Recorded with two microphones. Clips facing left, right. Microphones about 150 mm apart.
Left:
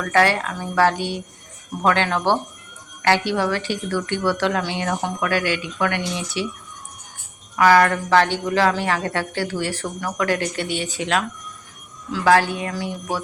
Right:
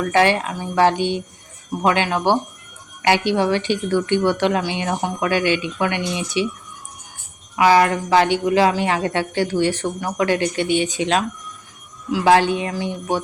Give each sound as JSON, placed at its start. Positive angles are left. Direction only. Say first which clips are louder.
{"t": 0.0, "sound": "a woman's voice", "louder": "right 2 dB", "side_deg": -20}
{"t": 7.5, "sound": "a woman's voice", "louder": "right 1 dB", "side_deg": -15}